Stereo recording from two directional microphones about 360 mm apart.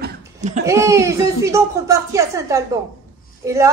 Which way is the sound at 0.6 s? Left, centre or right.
Centre.